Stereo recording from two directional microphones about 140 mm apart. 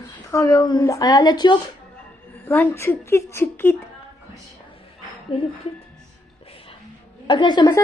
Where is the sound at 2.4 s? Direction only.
15° left (ahead or behind).